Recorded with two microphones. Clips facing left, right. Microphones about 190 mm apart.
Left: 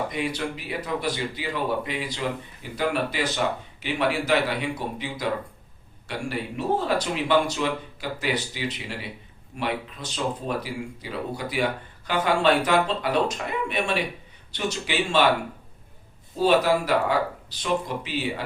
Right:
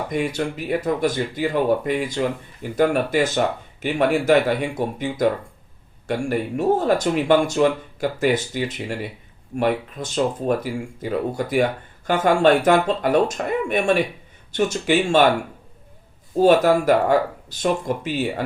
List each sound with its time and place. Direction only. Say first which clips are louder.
0.1 s speech: right 5 dB; 50° right (ahead or behind)
16.3 s speech: right 5 dB; 50° right (ahead or behind)